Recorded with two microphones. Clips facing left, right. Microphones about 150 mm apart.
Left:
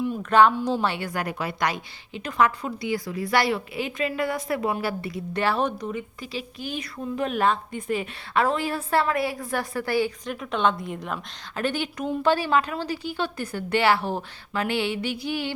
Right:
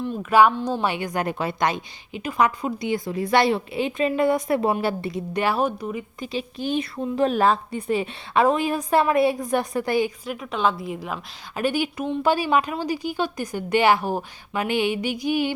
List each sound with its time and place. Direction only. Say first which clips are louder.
0.2 s a woman's voice: right 2 dB; 10° right (ahead or behind); by 5.2 s 25° right (ahead or behind)
5.3 s a woman's voice: right 1 dB; 15° right (ahead or behind)
6.1 s a woman's voice: right 5 dB; 20° right (ahead or behind)
10.2 s a woman's voice: even; 5° right (ahead or behind)